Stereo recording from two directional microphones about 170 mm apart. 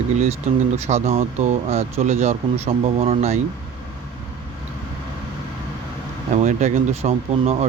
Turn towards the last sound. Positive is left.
turn(degrees=-35)  # may be behind; listen again after turning